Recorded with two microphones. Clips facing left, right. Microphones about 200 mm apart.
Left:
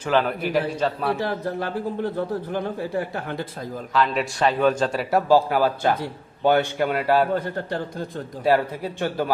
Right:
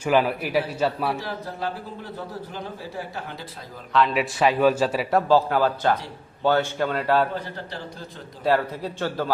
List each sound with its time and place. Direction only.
0.0 s a man's voice: 10° right (ahead or behind)
1.2 s speech: 55° left (ahead or behind)
3.9 s a man's voice: centre (ahead or behind)
5.1 s a man's voice: 10° left (ahead or behind)
7.3 s a man's voice: 50° left (ahead or behind)
8.4 s a man's voice: 10° left (ahead or behind)